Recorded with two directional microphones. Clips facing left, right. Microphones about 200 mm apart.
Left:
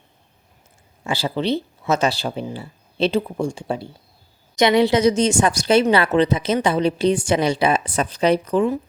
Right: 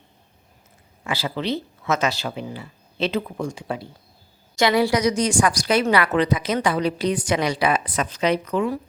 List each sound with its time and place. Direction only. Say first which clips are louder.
1.0 s a woman's voice: left 4 dB; 30° left (ahead or behind)